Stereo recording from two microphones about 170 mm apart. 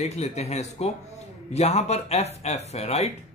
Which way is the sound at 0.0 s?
40° left (ahead or behind).